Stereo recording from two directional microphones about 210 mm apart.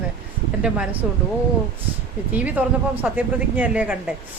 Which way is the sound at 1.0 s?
5° right (ahead or behind).